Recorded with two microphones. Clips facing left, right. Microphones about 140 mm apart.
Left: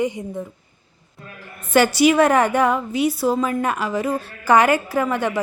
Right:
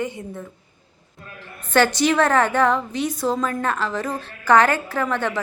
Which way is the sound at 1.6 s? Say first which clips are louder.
Left 3 dB; 10° left (ahead or behind).